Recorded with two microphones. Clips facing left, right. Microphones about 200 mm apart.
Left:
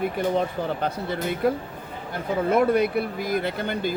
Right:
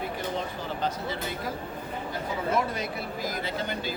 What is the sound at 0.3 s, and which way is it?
Speech, 60° left (ahead or behind).